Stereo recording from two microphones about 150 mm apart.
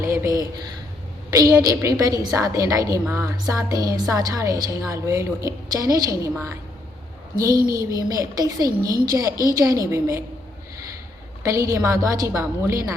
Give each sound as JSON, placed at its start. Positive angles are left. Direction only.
{"t": 0.0, "sound": "a woman's voice", "side_deg": -20}
{"t": 7.5, "sound": "a child's voice", "side_deg": -75}
{"t": 7.8, "sound": "a woman's voice", "side_deg": -20}
{"t": 11.4, "sound": "a woman's voice", "side_deg": -20}